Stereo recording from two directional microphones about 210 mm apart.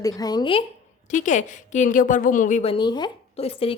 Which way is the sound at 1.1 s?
35° left (ahead or behind).